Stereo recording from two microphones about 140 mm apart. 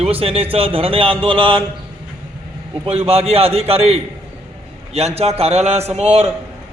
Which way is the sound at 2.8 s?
45° right (ahead or behind).